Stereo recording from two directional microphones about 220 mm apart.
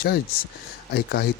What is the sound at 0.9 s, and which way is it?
Speech, 45° left (ahead or behind).